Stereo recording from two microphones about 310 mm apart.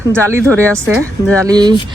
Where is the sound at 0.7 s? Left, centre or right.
Centre.